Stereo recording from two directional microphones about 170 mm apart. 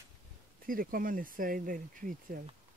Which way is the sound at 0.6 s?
55° right (ahead or behind).